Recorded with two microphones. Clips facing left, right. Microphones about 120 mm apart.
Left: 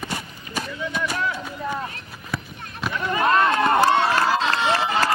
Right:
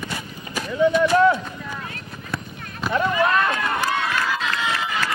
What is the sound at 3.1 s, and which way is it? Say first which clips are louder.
Run: left 6 dB; 35° left (ahead or behind).